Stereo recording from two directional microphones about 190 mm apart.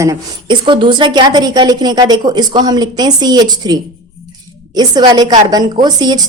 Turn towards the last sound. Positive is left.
turn(degrees=-20)  # may be behind; listen again after turning